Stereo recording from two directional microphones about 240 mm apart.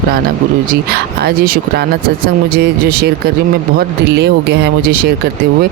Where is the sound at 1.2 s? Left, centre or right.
Right.